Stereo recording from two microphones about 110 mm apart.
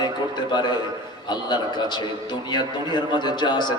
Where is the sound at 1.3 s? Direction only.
40° left (ahead or behind).